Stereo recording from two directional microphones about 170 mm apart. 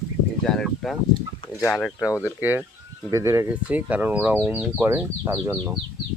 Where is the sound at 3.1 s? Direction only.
15° right (ahead or behind).